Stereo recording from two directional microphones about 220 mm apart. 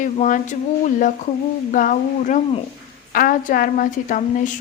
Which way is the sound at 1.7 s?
35° left (ahead or behind).